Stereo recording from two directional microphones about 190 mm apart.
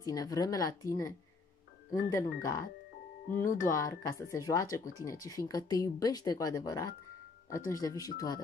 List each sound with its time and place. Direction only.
0.0 s a woman's voice: 20° left (ahead or behind)